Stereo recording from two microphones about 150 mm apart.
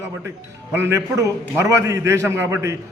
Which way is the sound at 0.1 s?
15° right (ahead or behind).